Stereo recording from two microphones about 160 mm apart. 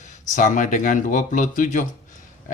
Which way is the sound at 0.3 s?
50° left (ahead or behind).